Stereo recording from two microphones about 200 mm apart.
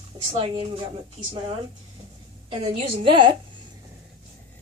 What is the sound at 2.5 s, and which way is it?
Speech, 30° right (ahead or behind).